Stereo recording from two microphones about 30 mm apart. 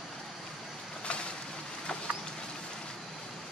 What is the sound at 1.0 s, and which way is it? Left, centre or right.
Boat, left.